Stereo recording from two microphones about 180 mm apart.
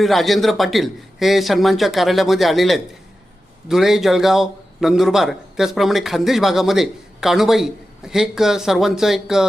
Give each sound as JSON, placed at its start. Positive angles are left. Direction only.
{"t": 0.0, "sound": "a man's voice", "side_deg": 0}